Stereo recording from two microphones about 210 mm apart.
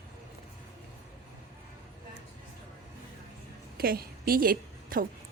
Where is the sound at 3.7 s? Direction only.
45° right (ahead or behind).